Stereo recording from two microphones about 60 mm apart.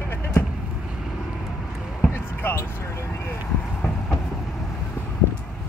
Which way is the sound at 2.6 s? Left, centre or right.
Left.